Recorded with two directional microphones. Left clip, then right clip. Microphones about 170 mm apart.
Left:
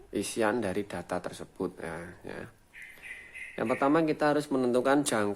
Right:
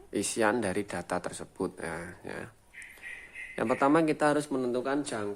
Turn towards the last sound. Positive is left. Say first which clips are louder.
# left 6 dB
turn(degrees=40)  # may be behind; listen again after turning